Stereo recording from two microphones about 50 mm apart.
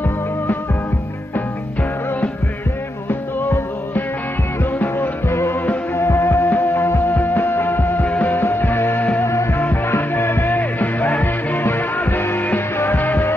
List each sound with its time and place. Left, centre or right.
3.1 s music: left
5.3 s music: left
5.9 s music: left
6.7 s music: left
7.1 s music: left
8.4 s music: left
9.2 s music: left